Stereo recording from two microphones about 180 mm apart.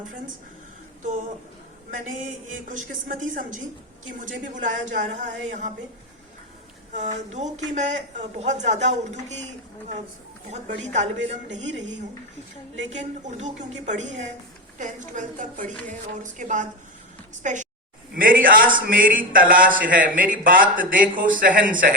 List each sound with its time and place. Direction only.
1.9 s a man's voice: 45° right (ahead or behind)
6.9 s a woman's voice: 40° right (ahead or behind)
10.5 s a woman's voice: 40° right (ahead or behind)
12.9 s a woman's voice: 40° right (ahead or behind)